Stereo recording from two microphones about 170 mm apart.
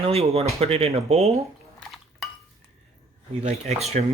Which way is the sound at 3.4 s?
40° right (ahead or behind).